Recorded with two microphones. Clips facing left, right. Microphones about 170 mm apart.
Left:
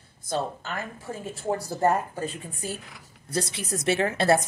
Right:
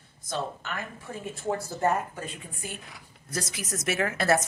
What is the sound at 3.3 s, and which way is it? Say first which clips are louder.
A woman's voice: left 5 dB; 30° left (ahead or behind).